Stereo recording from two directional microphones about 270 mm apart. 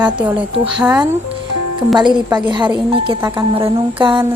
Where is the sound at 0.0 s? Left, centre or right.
Centre.